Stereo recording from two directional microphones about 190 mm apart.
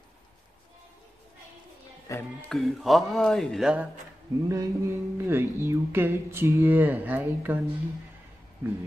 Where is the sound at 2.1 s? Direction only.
15° left (ahead or behind).